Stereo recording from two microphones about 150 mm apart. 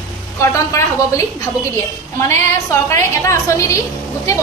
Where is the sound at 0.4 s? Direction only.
20° left (ahead or behind).